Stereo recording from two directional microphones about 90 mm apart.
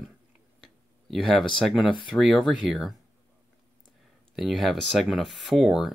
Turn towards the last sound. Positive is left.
turn(degrees=-5)  # may be behind; listen again after turning